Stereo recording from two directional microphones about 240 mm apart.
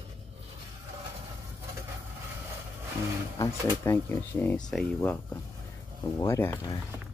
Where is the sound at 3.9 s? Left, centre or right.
Centre.